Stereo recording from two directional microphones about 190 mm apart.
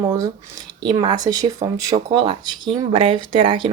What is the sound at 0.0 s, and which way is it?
Speech, 20° right (ahead or behind).